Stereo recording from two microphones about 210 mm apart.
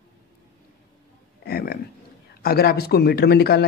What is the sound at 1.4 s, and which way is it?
Speech, 45° left (ahead or behind).